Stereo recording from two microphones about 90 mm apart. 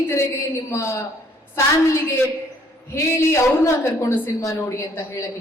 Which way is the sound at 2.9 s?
30° left (ahead or behind).